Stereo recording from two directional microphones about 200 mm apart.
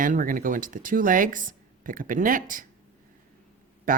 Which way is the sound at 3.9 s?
40° right (ahead or behind).